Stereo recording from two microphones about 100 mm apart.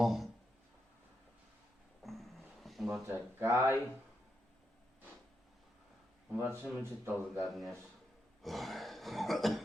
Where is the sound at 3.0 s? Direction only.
25° right (ahead or behind).